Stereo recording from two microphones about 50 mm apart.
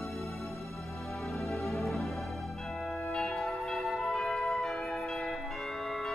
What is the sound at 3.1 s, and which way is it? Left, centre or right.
Music, centre.